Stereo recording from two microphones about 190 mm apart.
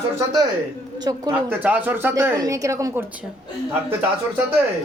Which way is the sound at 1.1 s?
15° right (ahead or behind).